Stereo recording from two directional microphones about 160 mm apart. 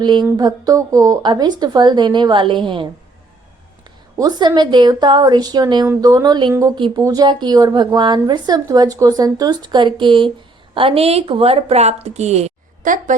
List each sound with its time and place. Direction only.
0.0 s speech: 30° right (ahead or behind)
4.2 s a woman's voice: 25° right (ahead or behind); by 13.1 s 55° right (ahead or behind)